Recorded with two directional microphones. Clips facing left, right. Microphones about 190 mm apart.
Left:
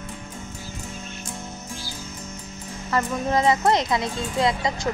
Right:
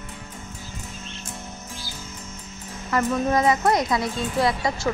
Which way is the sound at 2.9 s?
25° left (ahead or behind).